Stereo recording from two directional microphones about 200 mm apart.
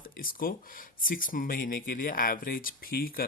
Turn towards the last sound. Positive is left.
turn(degrees=45)  # may be behind; listen again after turning